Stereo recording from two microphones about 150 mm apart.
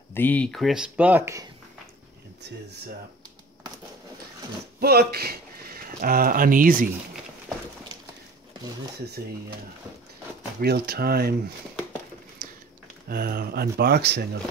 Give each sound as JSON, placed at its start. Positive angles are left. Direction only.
{"t": 0.1, "sound": "speech", "side_deg": 10}
{"t": 4.7, "sound": "speech", "side_deg": -90}
{"t": 9.2, "sound": "speech", "side_deg": -90}
{"t": 10.6, "sound": "speech", "side_deg": -90}
{"t": 12.4, "sound": "a sound", "side_deg": -70}
{"t": 13.1, "sound": "speech", "side_deg": -90}